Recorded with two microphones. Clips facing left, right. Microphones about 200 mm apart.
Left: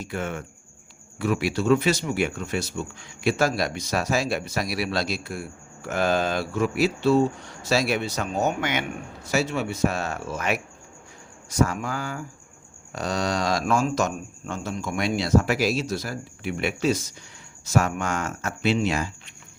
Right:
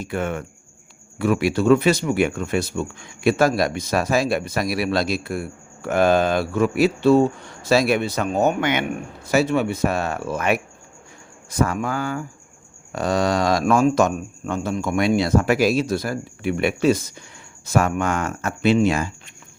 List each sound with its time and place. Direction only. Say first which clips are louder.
0.0 s speech: right 5 dB; 55° right (ahead or behind)